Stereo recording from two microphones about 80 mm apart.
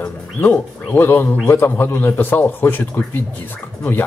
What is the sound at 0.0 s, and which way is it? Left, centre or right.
Speech, left.